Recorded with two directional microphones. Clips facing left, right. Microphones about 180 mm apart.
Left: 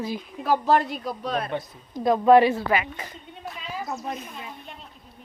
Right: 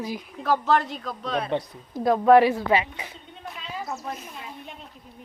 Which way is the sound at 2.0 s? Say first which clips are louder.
Even; 20° left (ahead or behind).